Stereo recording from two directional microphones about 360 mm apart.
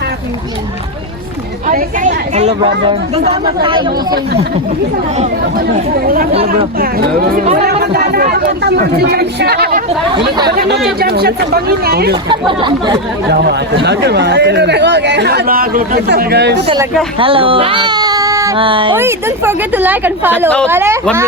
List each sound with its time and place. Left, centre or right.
1.6 s speech: right
6.1 s speech: centre
10.2 s speech: centre
10.5 s speech: right
12.3 s speech: centre
13.3 s speech: right
17.2 s speech: centre